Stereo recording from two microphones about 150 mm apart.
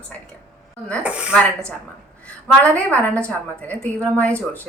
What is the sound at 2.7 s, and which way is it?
A woman's voice, 10° left (ahead or behind).